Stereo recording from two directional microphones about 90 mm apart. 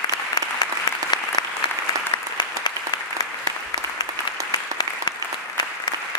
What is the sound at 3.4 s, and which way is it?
Applause, 40° right (ahead or behind).